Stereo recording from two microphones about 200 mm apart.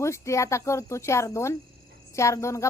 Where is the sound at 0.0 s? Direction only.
15° left (ahead or behind).